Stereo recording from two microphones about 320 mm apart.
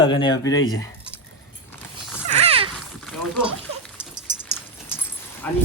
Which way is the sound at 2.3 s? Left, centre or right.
Centre.